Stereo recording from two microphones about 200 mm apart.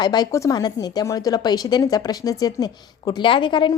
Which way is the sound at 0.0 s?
20° left (ahead or behind).